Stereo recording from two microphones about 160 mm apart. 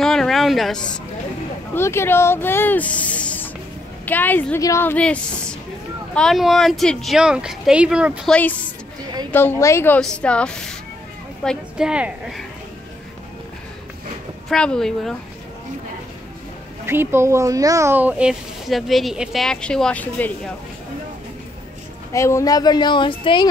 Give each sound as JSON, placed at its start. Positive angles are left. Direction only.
{"t": 0.0, "sound": "speech", "side_deg": 5}
{"t": 1.8, "sound": "a woman's voice", "side_deg": 15}
{"t": 8.3, "sound": "speech", "side_deg": 10}
{"t": 9.9, "sound": "speech", "side_deg": 5}
{"t": 14.5, "sound": "speech", "side_deg": 5}
{"t": 16.8, "sound": "speech", "side_deg": -15}
{"t": 22.1, "sound": "speech", "side_deg": 20}